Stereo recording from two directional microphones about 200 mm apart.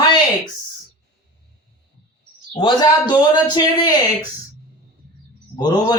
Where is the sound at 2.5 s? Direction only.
20° left (ahead or behind).